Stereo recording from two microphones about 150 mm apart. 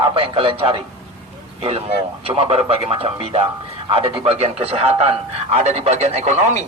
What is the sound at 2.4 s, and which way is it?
A man's voice, 40° right (ahead or behind).